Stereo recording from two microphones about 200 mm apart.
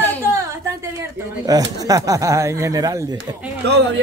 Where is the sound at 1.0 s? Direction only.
20° right (ahead or behind).